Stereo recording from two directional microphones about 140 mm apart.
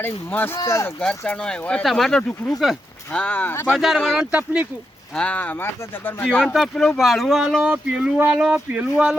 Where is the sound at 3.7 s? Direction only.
Centre (ahead or behind).